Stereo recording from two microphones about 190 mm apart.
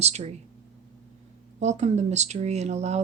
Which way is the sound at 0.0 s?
35° right (ahead or behind).